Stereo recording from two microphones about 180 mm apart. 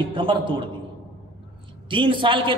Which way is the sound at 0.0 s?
30° right (ahead or behind).